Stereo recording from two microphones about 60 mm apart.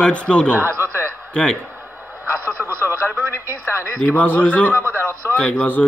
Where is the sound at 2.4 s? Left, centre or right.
Right.